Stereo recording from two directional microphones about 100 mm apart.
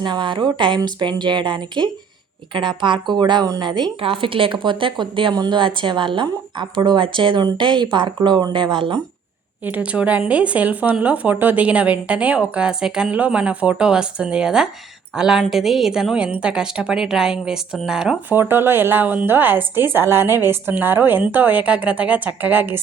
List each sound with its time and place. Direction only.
0.0 s a woman's voice: 50° right (ahead or behind)
4.0 s a woman's voice: 65° right (ahead or behind)
9.6 s a woman's voice: 15° right (ahead or behind)
18.3 s a woman's voice: 20° right (ahead or behind)